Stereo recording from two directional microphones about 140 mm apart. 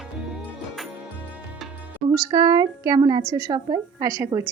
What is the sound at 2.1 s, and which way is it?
A woman's voice, 30° right (ahead or behind).